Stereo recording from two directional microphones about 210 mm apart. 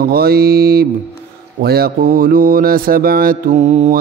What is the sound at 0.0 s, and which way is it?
A man's voice, 45° right (ahead or behind).